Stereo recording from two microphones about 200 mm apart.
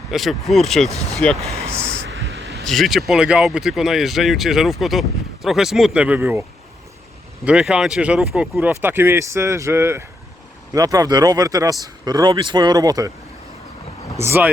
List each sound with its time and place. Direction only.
0.1 s speech: centre (ahead or behind)
1.5 s speech: 30° right (ahead or behind)
2.0 s a sound: 55° right (ahead or behind)
2.6 s speech: centre (ahead or behind)
7.4 s speech: 5° right (ahead or behind)
14.2 s speech: 10° right (ahead or behind)